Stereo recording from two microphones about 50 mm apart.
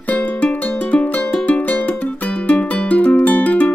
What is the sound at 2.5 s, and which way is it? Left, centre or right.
Music, left.